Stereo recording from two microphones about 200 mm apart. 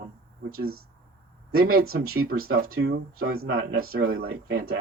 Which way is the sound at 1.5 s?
50° right (ahead or behind).